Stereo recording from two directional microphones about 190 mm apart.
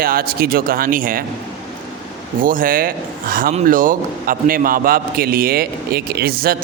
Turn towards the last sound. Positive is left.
turn(degrees=-50)  # may be behind; listen again after turning